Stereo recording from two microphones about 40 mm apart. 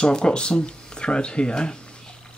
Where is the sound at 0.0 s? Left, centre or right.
Left.